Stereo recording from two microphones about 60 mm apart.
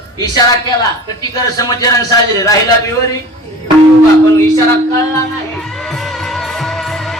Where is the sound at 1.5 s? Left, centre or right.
Left.